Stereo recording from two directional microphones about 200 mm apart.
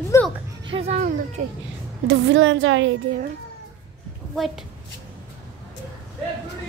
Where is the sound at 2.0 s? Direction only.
70° right (ahead or behind).